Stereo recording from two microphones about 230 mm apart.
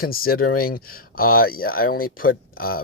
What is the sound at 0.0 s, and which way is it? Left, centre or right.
Speech, left.